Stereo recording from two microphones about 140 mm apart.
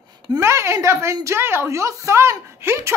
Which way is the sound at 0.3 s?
20° right (ahead or behind).